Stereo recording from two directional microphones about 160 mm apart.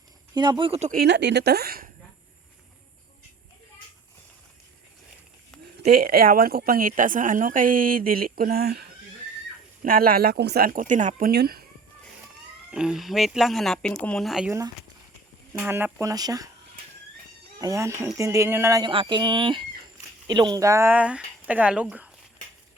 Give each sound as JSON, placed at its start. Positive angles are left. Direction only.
{"t": 0.3, "sound": "speech", "side_deg": -30}
{"t": 0.9, "sound": "a woman's voice", "side_deg": -80}
{"t": 6.0, "sound": "speech", "side_deg": -70}
{"t": 9.8, "sound": "speech", "side_deg": -65}
{"t": 11.3, "sound": "speech", "side_deg": -75}
{"t": 12.7, "sound": "speech", "side_deg": -5}
{"t": 15.5, "sound": "speech", "side_deg": -10}
{"t": 17.6, "sound": "speech", "side_deg": -20}